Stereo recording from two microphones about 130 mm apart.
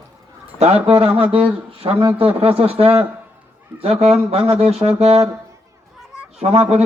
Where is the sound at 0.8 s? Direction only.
50° right (ahead or behind).